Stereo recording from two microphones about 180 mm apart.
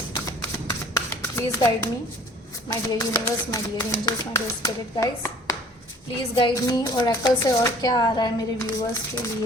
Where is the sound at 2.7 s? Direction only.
20° left (ahead or behind).